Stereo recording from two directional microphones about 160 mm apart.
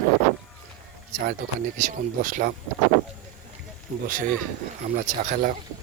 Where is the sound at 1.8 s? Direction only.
55° right (ahead or behind).